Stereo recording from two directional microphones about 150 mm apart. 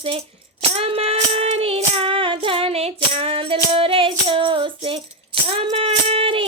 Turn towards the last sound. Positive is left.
turn(degrees=-40)  # may be behind; listen again after turning